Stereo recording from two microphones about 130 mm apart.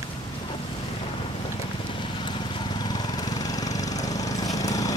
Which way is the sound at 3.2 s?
30° left (ahead or behind).